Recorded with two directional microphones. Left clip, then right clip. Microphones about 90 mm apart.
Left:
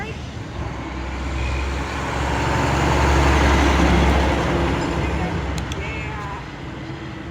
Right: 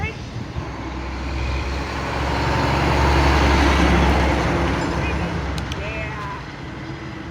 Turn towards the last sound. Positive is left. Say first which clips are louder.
# even
turn(degrees=-20)  # may be behind; listen again after turning